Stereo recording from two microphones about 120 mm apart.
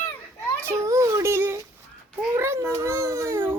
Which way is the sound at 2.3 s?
20° right (ahead or behind).